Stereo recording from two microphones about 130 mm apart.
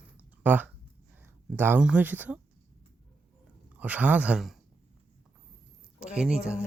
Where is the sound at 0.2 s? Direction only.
15° right (ahead or behind).